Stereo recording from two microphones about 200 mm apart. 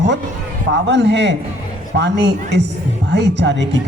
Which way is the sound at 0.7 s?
60° right (ahead or behind).